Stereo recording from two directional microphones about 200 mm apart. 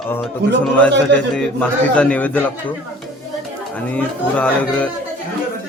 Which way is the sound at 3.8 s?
5° left (ahead or behind).